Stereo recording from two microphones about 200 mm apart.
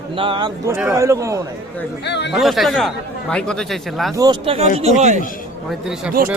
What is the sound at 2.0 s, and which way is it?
Speech, 60° left (ahead or behind).